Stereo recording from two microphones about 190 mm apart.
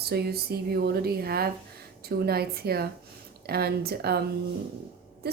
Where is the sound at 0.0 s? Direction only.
55° right (ahead or behind).